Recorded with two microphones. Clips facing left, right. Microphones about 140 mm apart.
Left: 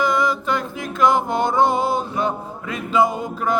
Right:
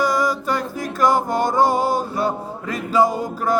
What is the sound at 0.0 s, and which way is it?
Music, 40° right (ahead or behind).